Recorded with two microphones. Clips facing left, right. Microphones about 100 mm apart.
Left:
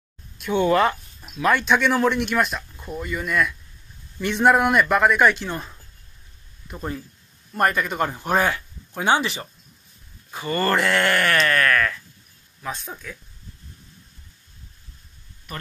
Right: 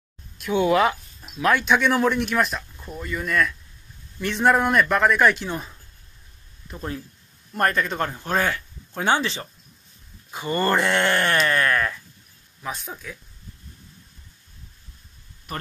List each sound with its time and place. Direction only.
0.4 s a man's voice: 5° right (ahead or behind)
6.7 s a man's voice: centre (ahead or behind)
10.3 s speech: 20° right (ahead or behind)
12.6 s a man's voice: 5° right (ahead or behind)